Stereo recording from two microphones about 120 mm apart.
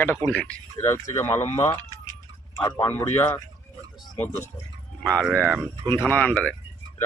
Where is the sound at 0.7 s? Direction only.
20° left (ahead or behind).